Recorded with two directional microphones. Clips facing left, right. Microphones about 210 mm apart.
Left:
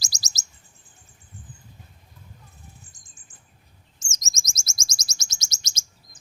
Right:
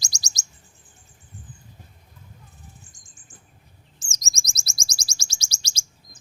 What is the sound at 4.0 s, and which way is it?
Chirp, 35° right (ahead or behind).